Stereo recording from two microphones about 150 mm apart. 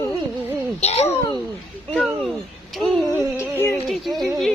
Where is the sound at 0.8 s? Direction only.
45° left (ahead or behind).